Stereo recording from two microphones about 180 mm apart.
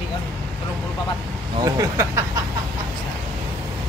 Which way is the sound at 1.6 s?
20° right (ahead or behind).